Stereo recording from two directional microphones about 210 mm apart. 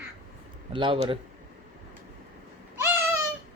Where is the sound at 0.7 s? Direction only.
25° right (ahead or behind).